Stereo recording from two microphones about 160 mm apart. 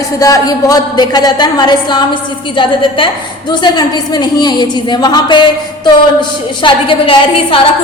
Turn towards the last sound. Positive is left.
turn(degrees=35)  # may be behind; listen again after turning